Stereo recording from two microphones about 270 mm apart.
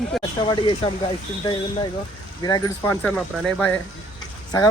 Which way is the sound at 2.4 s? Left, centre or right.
Centre.